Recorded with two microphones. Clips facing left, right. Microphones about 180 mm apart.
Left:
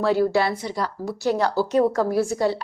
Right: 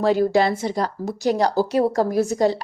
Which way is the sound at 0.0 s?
15° right (ahead or behind).